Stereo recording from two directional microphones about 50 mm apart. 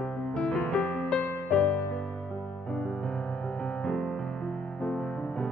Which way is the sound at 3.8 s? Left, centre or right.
Centre.